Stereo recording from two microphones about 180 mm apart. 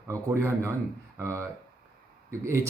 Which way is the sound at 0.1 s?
15° right (ahead or behind).